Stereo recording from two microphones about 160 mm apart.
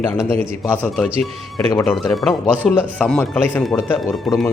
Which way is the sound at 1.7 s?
15° left (ahead or behind).